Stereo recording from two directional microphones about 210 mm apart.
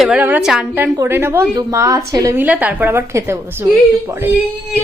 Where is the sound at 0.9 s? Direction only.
15° right (ahead or behind).